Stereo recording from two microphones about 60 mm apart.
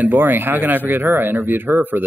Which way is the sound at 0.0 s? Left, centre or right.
Right.